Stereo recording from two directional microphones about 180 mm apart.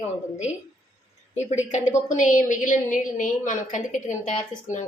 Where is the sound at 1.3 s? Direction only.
40° left (ahead or behind).